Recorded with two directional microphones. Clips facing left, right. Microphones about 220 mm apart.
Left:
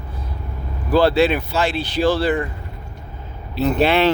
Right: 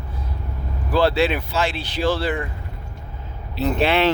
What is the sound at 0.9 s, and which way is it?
Speech, 40° left (ahead or behind).